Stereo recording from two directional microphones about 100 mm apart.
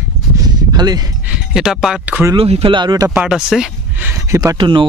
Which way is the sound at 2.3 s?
80° right.